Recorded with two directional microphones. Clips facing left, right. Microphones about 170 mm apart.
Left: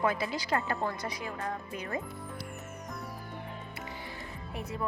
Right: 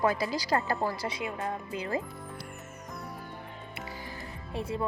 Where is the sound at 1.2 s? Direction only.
20° right (ahead or behind).